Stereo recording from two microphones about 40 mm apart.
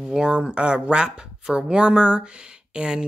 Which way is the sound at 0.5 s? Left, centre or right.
Right.